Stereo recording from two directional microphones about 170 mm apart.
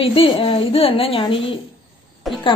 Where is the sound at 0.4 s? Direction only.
35° left (ahead or behind).